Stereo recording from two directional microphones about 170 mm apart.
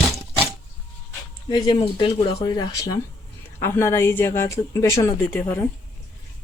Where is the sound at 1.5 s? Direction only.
25° left (ahead or behind).